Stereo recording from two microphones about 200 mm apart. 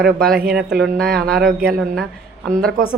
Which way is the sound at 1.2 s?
50° right (ahead or behind).